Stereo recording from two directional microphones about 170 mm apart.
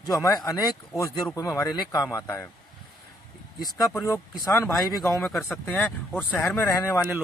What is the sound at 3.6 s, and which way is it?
Speech, 20° left (ahead or behind).